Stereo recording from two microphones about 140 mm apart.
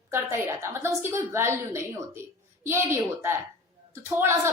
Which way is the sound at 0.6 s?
20° right (ahead or behind).